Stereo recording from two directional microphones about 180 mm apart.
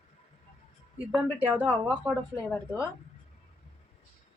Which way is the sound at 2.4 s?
10° left (ahead or behind).